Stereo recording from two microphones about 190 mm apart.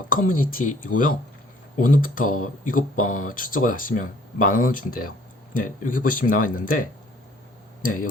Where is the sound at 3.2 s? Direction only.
45° left (ahead or behind).